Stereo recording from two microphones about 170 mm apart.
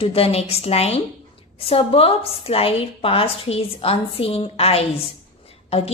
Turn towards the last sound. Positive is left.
turn(degrees=35)  # may be behind; listen again after turning